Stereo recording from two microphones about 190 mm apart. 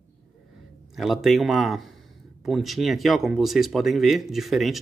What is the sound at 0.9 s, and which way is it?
Speech, centre (ahead or behind).